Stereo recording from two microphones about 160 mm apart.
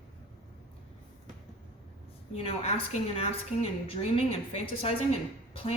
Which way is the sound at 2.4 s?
35° left (ahead or behind).